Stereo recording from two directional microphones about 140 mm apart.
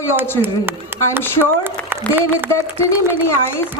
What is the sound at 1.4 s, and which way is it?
Speech, 15° right (ahead or behind).